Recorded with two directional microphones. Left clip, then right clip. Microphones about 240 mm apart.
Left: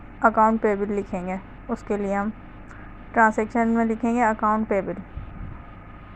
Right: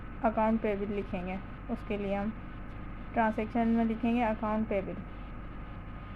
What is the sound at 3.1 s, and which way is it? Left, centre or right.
A woman's voice, centre.